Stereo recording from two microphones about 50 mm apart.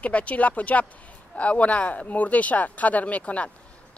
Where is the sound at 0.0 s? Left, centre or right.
Left.